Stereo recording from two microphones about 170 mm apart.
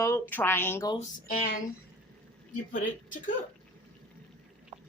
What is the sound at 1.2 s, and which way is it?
Speech, 50° left (ahead or behind).